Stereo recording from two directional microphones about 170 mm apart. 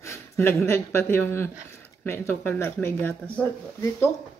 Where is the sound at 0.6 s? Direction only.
15° left (ahead or behind).